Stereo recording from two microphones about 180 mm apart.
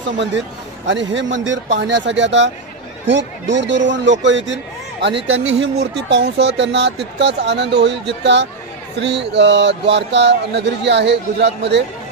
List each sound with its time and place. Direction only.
0.8 s speech: 90° right; by 11.8 s 70° right (ahead or behind)